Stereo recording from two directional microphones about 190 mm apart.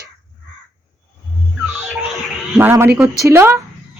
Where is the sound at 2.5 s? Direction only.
10° right (ahead or behind).